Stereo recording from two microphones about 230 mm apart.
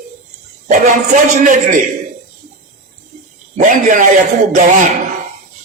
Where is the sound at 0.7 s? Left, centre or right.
Right.